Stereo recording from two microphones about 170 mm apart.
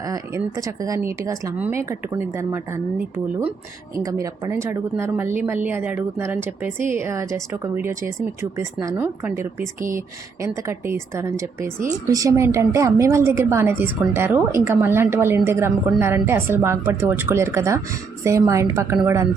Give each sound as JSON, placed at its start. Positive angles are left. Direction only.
{"t": 0.1, "sound": "a woman's voice", "side_deg": -20}
{"t": 4.0, "sound": "a woman's voice", "side_deg": -20}